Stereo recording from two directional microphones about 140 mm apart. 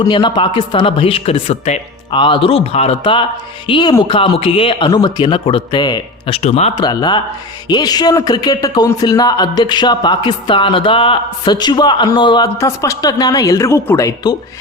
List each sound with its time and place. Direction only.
0.1 s a man's voice: 35° left (ahead or behind)
2.1 s a man's voice: 35° left (ahead or behind)
6.3 s speech: 50° left (ahead or behind)
6.7 s a man's voice: 30° left (ahead or behind)
12.5 s a woman's voice: 20° left (ahead or behind)